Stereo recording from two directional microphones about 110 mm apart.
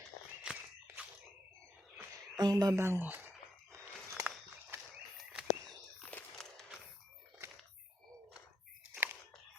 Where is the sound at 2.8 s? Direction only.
20° right (ahead or behind).